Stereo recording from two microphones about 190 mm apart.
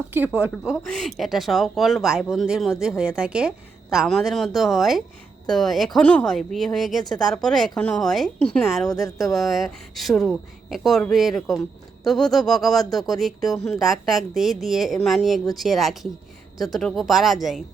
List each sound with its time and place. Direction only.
0.5 s speech: centre (ahead or behind)